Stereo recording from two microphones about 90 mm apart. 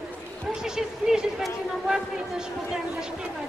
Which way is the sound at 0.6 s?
5° right (ahead or behind).